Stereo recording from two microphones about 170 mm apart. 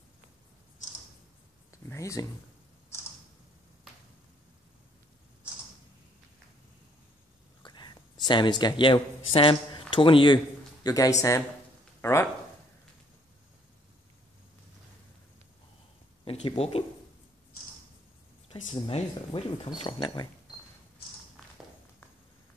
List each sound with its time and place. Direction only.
1.9 s speech: 20° left (ahead or behind)
2.9 s tick: 15° left (ahead or behind)
7.6 s speech: 25° left (ahead or behind)
16.3 s speech: 35° left (ahead or behind)
18.7 s speech: 35° left (ahead or behind)